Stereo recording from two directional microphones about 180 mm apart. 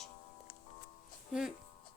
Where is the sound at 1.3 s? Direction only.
5° right (ahead or behind).